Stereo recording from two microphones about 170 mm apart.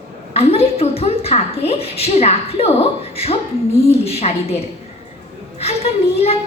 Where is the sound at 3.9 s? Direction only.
35° left (ahead or behind).